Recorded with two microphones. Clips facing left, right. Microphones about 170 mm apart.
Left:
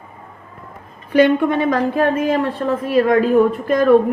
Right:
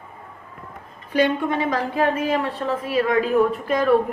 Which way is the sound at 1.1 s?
65° left (ahead or behind).